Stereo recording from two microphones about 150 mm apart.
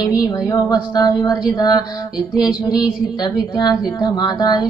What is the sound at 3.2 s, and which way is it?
Music, 30° left (ahead or behind).